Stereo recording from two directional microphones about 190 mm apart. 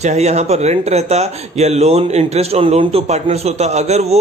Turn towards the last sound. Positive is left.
turn(degrees=-35)  # may be behind; listen again after turning